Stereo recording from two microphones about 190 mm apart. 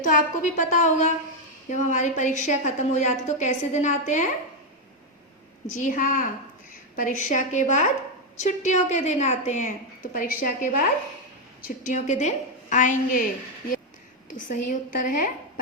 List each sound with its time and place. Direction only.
0.0 s a woman's voice: 45° left (ahead or behind)
5.7 s a woman's voice: 45° left (ahead or behind)
14.3 s a woman's voice: 45° left (ahead or behind)